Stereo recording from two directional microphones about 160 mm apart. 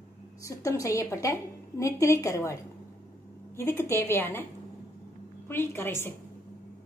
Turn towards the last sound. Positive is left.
turn(degrees=15)  # may be behind; listen again after turning